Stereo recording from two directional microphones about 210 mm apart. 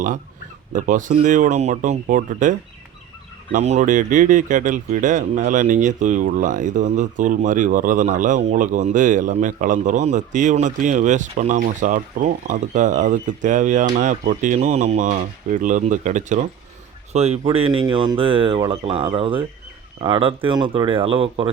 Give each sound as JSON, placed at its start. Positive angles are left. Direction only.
{"t": 0.7, "sound": "speech", "side_deg": -35}